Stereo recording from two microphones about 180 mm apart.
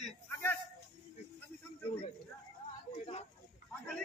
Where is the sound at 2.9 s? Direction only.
35° left (ahead or behind).